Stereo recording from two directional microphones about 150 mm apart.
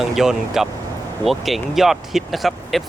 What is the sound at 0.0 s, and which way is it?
Speech, 5° right (ahead or behind).